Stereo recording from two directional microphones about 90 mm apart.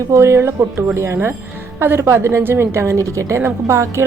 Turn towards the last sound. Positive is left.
turn(degrees=-35)  # may be behind; listen again after turning